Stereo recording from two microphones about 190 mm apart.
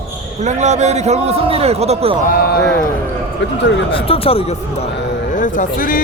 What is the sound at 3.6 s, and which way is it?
Speech, 70° left (ahead or behind).